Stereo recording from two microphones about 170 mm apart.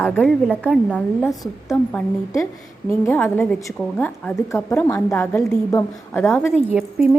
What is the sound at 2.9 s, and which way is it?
A woman's voice, 15° left (ahead or behind).